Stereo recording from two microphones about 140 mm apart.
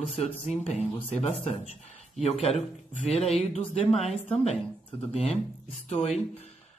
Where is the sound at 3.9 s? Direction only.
45° left (ahead or behind).